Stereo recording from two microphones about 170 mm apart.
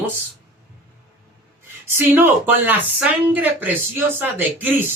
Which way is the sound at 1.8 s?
10° right (ahead or behind).